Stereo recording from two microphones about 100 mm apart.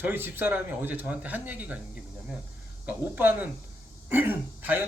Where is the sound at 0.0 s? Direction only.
20° right (ahead or behind).